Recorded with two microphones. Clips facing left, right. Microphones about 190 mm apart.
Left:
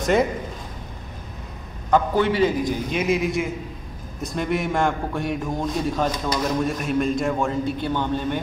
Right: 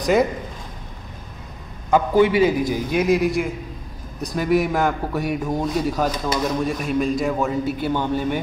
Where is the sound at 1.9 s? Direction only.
10° right (ahead or behind).